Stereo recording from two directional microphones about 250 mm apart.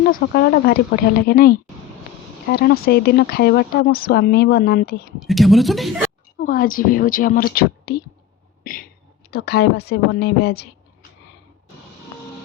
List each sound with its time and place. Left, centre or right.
0.1 s speech: left
5.2 s speech: centre
6.4 s speech: left
8.6 s a sound: left
9.3 s speech: left